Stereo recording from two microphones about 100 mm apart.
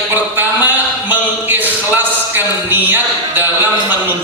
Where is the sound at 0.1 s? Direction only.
20° right (ahead or behind).